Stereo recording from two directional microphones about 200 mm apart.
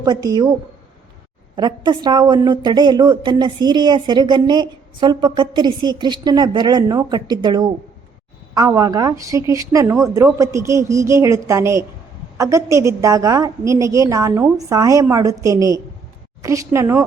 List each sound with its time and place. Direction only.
0.0 s a woman's voice: 20° right (ahead or behind)
1.5 s a woman's voice: 20° right (ahead or behind)